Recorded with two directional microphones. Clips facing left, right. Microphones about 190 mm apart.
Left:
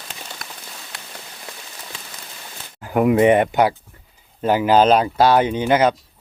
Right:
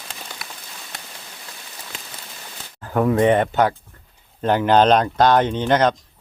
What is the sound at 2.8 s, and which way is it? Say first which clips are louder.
Speech: left 2 dB; 15° left (ahead or behind).